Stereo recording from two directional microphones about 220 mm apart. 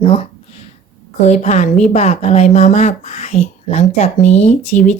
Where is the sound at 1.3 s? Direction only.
30° left (ahead or behind).